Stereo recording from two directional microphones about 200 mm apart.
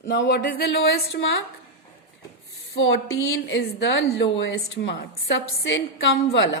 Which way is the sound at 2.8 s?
75° left (ahead or behind).